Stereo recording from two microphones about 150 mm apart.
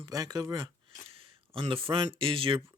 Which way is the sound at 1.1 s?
40° right (ahead or behind).